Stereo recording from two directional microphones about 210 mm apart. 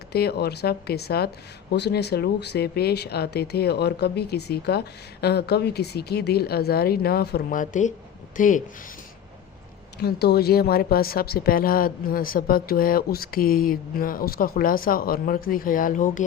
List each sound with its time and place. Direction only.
0.1 s speech: 50° left (ahead or behind)
10.0 s speech: 50° left (ahead or behind)